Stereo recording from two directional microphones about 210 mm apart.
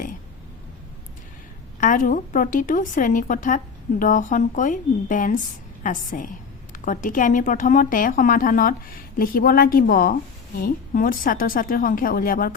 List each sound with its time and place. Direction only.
1.8 s a woman's voice: 40° left (ahead or behind)